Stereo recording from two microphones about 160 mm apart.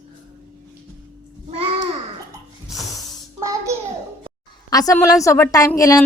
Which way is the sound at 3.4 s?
20° right (ahead or behind).